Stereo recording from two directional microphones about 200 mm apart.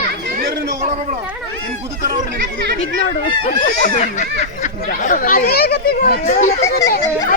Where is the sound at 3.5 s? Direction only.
40° left (ahead or behind).